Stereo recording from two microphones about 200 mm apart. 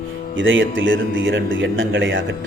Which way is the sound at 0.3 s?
70° right (ahead or behind).